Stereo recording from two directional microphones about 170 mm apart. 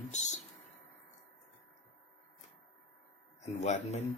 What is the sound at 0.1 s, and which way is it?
Speech, 40° left (ahead or behind).